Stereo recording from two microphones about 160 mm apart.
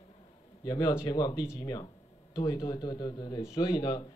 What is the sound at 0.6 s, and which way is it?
Speech, 25° left (ahead or behind).